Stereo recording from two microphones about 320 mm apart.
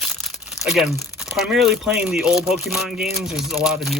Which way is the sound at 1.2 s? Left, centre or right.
Centre.